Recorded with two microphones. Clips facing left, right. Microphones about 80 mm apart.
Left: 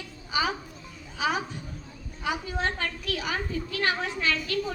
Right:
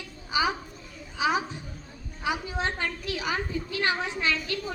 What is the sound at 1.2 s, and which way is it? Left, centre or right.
A woman's voice, centre.